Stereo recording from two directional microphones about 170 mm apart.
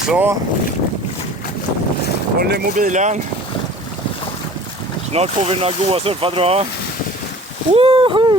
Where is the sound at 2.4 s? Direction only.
70° right (ahead or behind).